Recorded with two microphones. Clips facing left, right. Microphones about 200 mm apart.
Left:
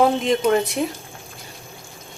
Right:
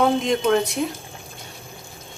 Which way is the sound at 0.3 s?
Centre (ahead or behind).